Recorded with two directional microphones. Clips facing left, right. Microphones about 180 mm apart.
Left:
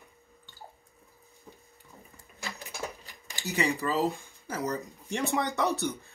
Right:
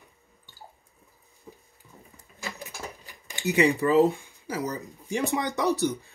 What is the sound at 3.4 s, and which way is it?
Speech, 15° right (ahead or behind).